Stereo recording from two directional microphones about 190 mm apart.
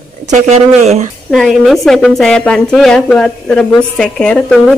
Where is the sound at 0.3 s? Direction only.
35° right (ahead or behind).